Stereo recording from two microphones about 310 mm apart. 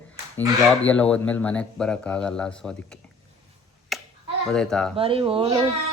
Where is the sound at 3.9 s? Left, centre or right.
Centre.